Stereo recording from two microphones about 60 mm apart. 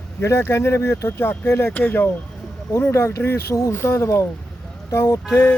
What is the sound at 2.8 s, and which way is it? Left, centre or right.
Speech, left.